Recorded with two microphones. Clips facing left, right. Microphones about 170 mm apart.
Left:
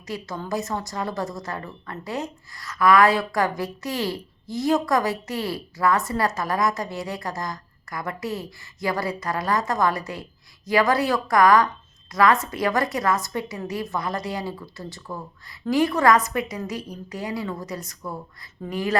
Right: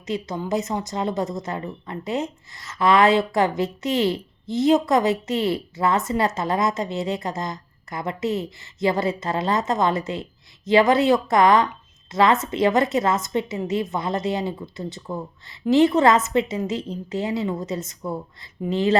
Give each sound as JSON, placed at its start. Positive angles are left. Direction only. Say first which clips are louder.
{"t": 0.1, "sound": "speech", "louder": "right 4 dB", "side_deg": -20}